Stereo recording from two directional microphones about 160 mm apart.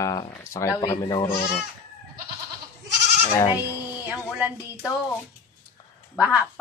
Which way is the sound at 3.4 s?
25° left (ahead or behind).